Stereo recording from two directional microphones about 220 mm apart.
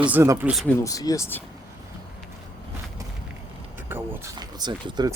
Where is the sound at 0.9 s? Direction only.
15° left (ahead or behind).